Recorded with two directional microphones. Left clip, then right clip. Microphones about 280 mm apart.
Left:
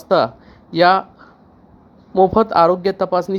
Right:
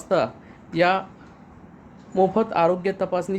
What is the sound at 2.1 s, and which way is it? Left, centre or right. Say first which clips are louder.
Speech: left 7 dB; left.